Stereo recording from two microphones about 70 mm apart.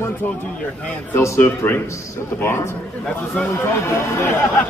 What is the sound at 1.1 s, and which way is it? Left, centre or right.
A man's voice, left.